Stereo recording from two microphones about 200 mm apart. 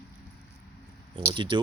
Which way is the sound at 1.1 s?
25° right (ahead or behind).